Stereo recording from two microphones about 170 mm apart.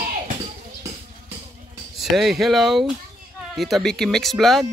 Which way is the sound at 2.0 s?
Centre (ahead or behind).